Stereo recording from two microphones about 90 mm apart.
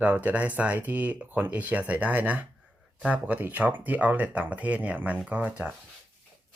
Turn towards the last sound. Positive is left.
turn(degrees=-15)  # may be behind; listen again after turning